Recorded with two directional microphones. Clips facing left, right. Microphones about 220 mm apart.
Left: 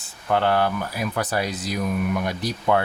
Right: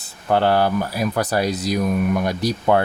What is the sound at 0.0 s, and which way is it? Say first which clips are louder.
Speech: right 3 dB; 35° right (ahead or behind).